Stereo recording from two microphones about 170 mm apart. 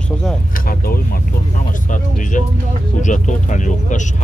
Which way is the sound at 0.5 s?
60° left (ahead or behind).